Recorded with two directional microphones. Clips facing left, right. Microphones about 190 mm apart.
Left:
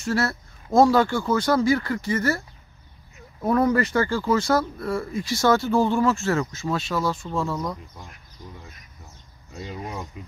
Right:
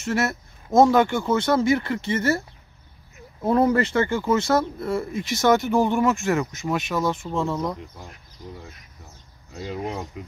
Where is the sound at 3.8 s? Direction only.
25° right (ahead or behind).